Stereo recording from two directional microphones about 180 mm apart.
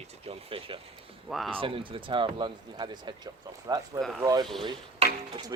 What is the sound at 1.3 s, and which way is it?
Speech, centre (ahead or behind).